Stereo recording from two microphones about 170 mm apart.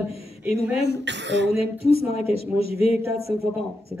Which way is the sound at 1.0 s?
90° right.